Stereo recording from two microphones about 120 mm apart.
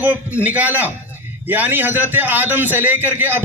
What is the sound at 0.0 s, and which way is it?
A man's voice, 15° right (ahead or behind).